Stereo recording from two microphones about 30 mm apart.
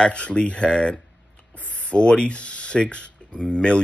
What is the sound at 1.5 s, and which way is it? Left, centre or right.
Speech, left.